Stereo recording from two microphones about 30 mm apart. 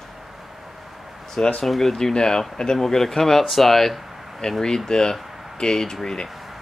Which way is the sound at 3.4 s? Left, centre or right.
Centre.